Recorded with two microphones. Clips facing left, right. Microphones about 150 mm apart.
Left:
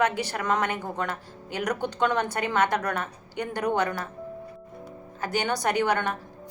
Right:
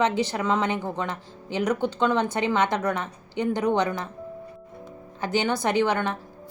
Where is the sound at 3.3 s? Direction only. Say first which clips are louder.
Right 4 dB; 10° left (ahead or behind).